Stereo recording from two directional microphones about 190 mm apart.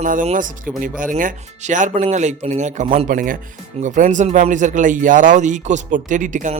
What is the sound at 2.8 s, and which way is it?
Speech, 30° right (ahead or behind).